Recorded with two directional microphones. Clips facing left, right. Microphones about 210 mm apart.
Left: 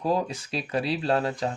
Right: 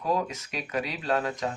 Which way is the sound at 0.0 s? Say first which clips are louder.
Left 2 dB; 30° left (ahead or behind).